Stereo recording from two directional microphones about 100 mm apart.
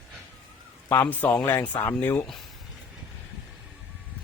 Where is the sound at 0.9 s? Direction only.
20° left (ahead or behind).